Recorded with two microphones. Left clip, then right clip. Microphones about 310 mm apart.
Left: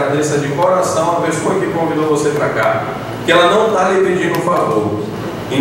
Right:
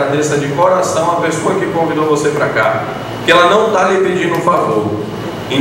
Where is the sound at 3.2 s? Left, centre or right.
Centre.